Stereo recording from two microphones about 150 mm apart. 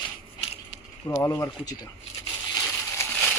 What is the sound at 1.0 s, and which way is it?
Speech, 20° left (ahead or behind).